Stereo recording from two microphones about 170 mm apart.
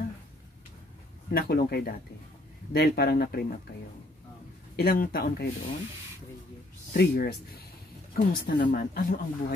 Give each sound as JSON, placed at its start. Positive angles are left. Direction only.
{"t": 1.3, "sound": "speech", "side_deg": 65}
{"t": 4.7, "sound": "speech", "side_deg": 60}
{"t": 6.9, "sound": "speech", "side_deg": 70}
{"t": 8.1, "sound": "speech", "side_deg": 55}